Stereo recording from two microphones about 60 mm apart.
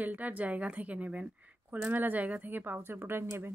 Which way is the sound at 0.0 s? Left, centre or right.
Right.